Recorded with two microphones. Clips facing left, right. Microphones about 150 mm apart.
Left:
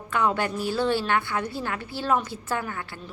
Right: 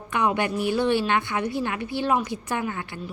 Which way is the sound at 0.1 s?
15° right (ahead or behind).